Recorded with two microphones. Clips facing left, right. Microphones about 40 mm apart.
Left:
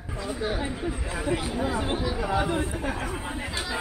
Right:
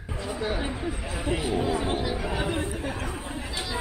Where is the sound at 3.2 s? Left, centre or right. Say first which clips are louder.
Left 2 dB; centre.